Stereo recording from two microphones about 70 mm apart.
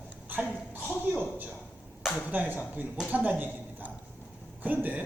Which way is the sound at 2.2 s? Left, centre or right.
Right.